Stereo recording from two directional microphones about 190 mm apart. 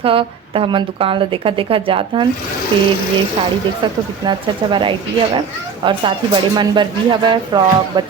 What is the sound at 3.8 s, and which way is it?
Speech, 25° right (ahead or behind).